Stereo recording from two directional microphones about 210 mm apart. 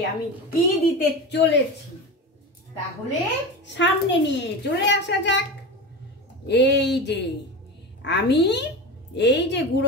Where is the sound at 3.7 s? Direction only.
60° left (ahead or behind).